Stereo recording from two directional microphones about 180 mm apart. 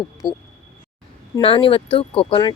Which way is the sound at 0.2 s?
25° left (ahead or behind).